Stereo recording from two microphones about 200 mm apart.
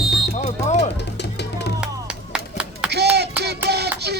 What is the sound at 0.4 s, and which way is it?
Music, 35° left (ahead or behind).